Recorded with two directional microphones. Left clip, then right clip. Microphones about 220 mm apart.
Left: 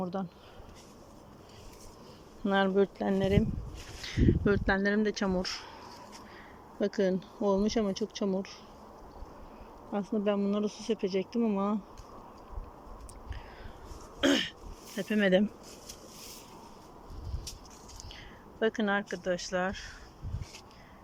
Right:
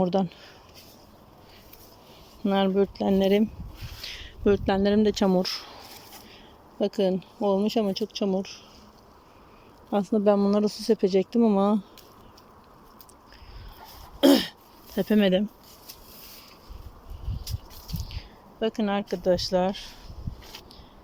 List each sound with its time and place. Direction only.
0.0 s speech: 30° right (ahead or behind)
2.4 s speech: 10° right (ahead or behind)
6.7 s speech: 5° right (ahead or behind)
9.9 s speech: 15° right (ahead or behind)
14.2 s throat clearing: 20° right (ahead or behind)
14.9 s speech: 20° right (ahead or behind)
18.6 s speech: 5° right (ahead or behind)